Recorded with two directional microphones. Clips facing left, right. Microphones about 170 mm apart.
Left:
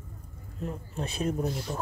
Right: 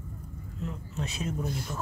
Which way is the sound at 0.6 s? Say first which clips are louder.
Left 2 dB; 55° left (ahead or behind).